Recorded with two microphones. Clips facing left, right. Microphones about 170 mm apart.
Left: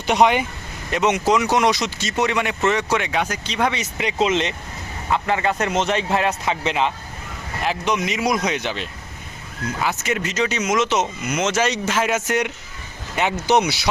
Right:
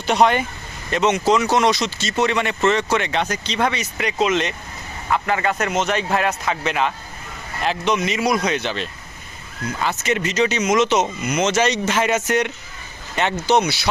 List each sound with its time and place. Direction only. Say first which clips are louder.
0.1 s speech: even; 15° left (ahead or behind)
7.6 s speech: right 2 dB; 10° left (ahead or behind)